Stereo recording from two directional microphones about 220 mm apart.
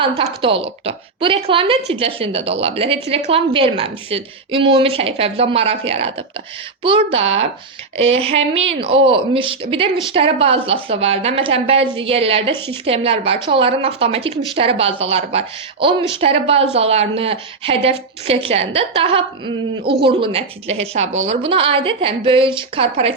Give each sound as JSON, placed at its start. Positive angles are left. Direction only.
{"t": 0.0, "sound": "a woman's voice", "side_deg": -25}
{"t": 12.5, "sound": "a woman's voice", "side_deg": 10}
{"t": 12.8, "sound": "a woman's voice", "side_deg": -25}
{"t": 19.8, "sound": "speech", "side_deg": -45}
{"t": 20.1, "sound": "a woman's voice", "side_deg": -25}